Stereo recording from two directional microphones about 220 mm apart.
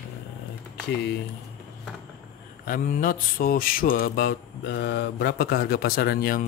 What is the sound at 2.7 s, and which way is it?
Mantra, 40° left (ahead or behind).